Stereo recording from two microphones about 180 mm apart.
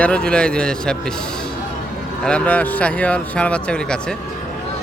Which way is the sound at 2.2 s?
5° left (ahead or behind).